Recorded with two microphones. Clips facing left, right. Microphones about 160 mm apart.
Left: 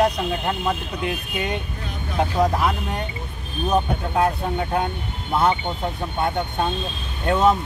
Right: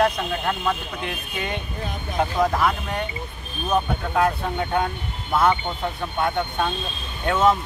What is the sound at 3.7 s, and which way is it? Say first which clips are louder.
Speech: left 1 dB; 20° left (ahead or behind).